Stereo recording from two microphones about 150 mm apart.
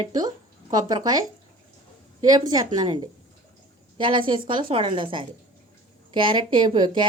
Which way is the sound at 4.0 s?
35° right (ahead or behind).